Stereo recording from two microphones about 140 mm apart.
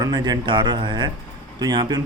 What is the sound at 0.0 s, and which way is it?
A man's voice, 30° right (ahead or behind).